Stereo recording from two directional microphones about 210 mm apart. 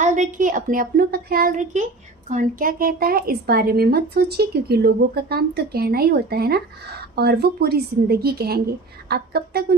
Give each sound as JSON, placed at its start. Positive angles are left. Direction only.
{"t": 0.0, "sound": "a woman's voice", "side_deg": -35}